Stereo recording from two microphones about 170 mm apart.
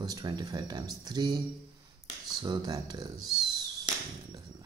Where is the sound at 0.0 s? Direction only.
25° right (ahead or behind).